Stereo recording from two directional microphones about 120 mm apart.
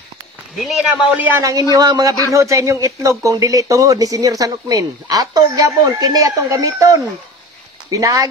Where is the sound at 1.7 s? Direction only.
30° right (ahead or behind).